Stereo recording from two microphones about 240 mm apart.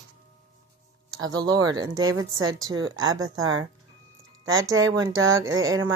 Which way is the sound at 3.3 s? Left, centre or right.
Right.